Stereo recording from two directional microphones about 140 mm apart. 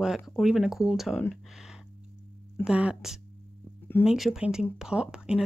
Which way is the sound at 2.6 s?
5° right (ahead or behind).